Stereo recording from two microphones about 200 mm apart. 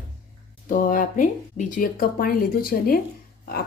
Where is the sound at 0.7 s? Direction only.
40° left (ahead or behind).